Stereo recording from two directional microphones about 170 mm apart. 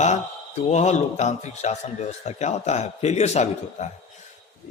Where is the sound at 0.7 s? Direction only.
40° left (ahead or behind).